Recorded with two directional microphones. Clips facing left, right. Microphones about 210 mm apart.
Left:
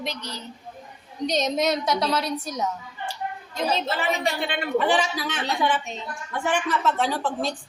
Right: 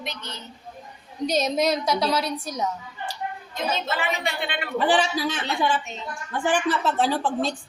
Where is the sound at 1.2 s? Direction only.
Centre (ahead or behind).